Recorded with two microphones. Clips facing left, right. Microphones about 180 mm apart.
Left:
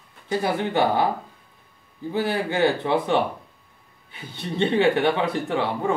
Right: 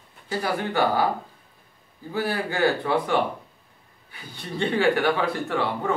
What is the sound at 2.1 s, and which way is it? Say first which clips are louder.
Speech: left 3 dB; 20° left (ahead or behind).